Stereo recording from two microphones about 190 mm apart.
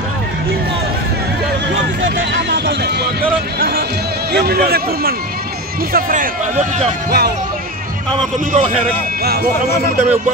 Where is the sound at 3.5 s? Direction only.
55° right (ahead or behind).